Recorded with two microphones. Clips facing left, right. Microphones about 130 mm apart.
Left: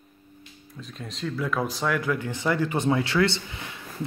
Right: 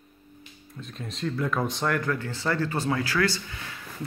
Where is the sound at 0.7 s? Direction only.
Centre (ahead or behind).